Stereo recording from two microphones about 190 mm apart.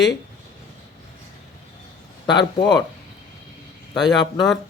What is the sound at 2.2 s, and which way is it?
Speech, 20° left (ahead or behind).